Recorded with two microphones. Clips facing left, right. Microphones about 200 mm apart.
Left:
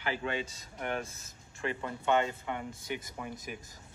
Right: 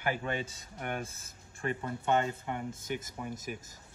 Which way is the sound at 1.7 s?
45° right (ahead or behind).